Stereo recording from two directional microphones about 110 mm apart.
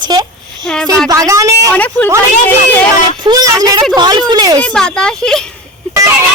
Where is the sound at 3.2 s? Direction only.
35° right (ahead or behind).